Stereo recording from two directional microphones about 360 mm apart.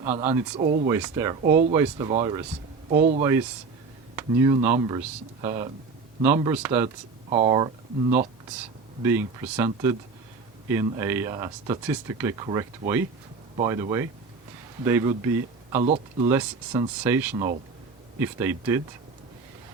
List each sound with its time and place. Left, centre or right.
0.0 s speech: centre
0.9 s speech: centre
3.2 s speech: centre
9.0 s speech: centre
15.8 s speech: centre
16.3 s speech: centre